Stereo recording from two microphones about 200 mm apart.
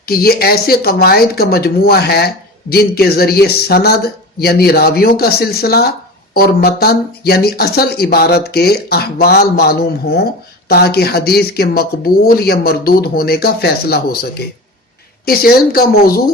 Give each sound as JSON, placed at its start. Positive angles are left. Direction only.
{"t": 0.0, "sound": "speech", "side_deg": 50}